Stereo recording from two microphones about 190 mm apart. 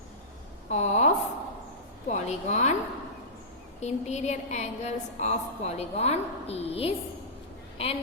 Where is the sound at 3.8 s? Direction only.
35° left (ahead or behind).